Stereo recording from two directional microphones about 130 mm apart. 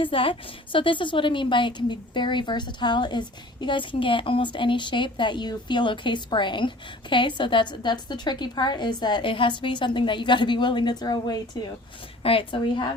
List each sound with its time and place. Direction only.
0.0 s a woman's voice: 45° left (ahead or behind)
12.2 s a woman's voice: 45° left (ahead or behind)